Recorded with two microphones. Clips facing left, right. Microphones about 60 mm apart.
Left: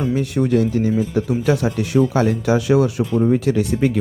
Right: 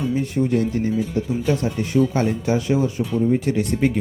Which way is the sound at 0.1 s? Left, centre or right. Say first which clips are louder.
Left 3 dB; left.